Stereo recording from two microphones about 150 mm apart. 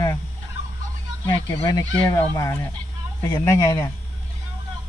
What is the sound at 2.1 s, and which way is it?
Speech, 20° left (ahead or behind).